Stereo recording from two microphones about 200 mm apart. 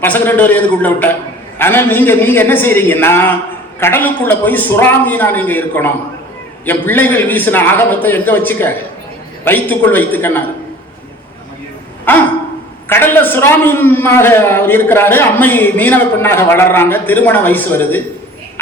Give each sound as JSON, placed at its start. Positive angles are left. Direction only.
{"t": 0.0, "sound": "a man's voice", "side_deg": 10}
{"t": 12.1, "sound": "a man's voice", "side_deg": 10}